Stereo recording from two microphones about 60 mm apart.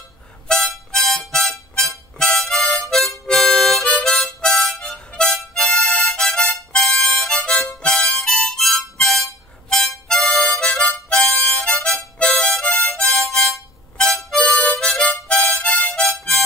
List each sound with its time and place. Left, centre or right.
0.5 s harmonica: centre
2.6 s harmonica: centre
13.1 s harmonica: centre
14.4 s harmonica: left